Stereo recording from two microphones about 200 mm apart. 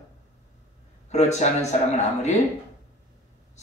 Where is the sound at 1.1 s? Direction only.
35° left (ahead or behind).